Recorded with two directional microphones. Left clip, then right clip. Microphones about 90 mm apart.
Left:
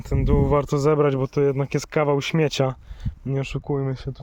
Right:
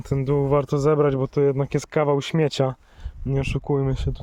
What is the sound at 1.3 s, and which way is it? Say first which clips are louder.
Speech: right 1 dB; 15° right (ahead or behind).